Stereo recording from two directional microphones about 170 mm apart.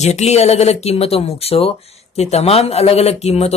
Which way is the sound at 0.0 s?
40° left (ahead or behind).